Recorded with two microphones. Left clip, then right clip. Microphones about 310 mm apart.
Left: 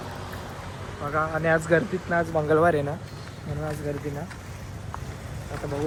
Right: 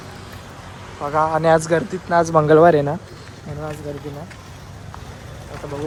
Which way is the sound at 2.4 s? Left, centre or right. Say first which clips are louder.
Right 8 dB; right.